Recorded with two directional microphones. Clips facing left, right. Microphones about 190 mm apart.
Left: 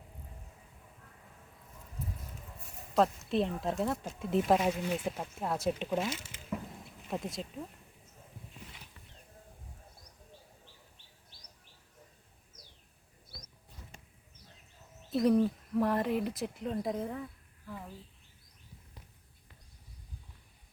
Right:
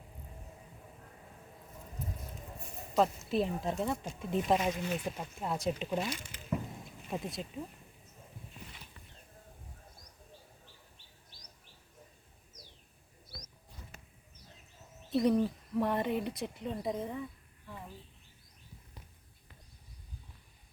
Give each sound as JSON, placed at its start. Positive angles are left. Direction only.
{"t": 2.9, "sound": "speech", "side_deg": 0}
{"t": 6.1, "sound": "speech", "side_deg": 25}
{"t": 7.1, "sound": "speech", "side_deg": 0}
{"t": 15.1, "sound": "speech", "side_deg": 0}